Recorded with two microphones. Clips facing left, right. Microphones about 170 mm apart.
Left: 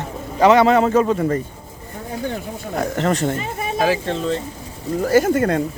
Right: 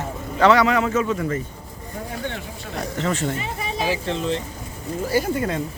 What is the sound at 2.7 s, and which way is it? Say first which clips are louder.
Speech: left 5 dB; 60° left (ahead or behind).